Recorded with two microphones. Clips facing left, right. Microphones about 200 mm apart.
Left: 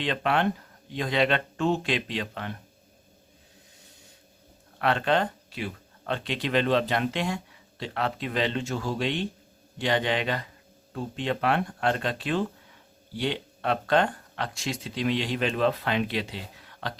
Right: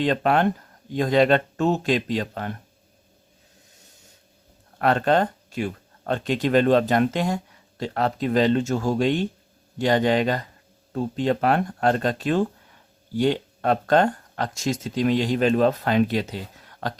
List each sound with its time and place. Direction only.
0.0 s speech: 40° right (ahead or behind)
4.8 s speech: 45° right (ahead or behind)